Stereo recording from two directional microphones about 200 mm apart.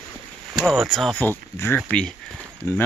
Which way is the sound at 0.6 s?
Centre (ahead or behind).